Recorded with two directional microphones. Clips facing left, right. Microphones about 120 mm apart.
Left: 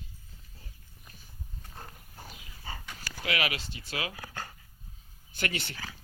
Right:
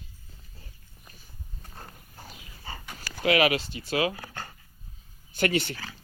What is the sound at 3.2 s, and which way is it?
Speech, 30° right (ahead or behind).